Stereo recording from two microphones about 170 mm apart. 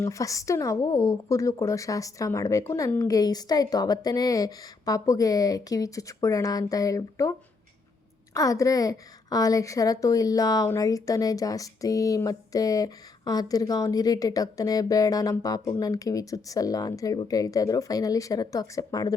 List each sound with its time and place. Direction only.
0.0 s speech: 20° left (ahead or behind)